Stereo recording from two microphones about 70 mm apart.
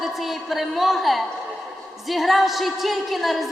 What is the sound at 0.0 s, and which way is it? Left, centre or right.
A woman's voice, centre.